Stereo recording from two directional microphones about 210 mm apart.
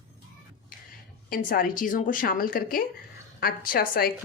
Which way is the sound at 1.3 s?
40° left (ahead or behind).